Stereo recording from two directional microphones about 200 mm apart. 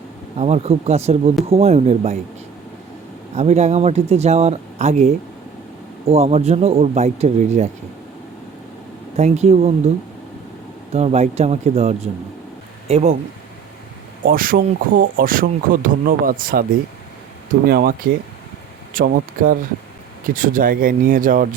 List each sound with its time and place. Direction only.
0.3 s speech: 30° right (ahead or behind)
3.3 s speech: 35° right (ahead or behind)
9.1 s speech: 35° right (ahead or behind)
10.9 s speech: 30° right (ahead or behind)
14.3 s speech: 45° right (ahead or behind)
17.7 s speech: 50° right (ahead or behind)